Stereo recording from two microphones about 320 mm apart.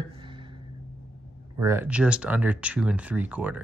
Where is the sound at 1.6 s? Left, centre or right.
Centre.